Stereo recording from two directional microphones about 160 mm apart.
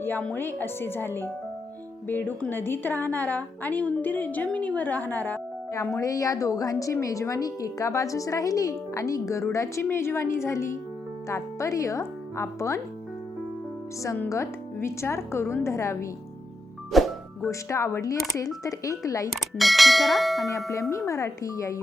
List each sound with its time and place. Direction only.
0.0 s a woman's voice: 10° left (ahead or behind)
14.0 s a woman's voice: 20° left (ahead or behind)
16.9 s music: centre (ahead or behind)
17.5 s speech: 20° left (ahead or behind)
19.3 s bell: centre (ahead or behind)
20.9 s speech: 20° left (ahead or behind)